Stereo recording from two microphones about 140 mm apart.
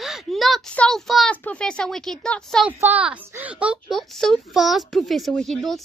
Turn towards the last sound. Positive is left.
turn(degrees=0)  # may be behind; listen again after turning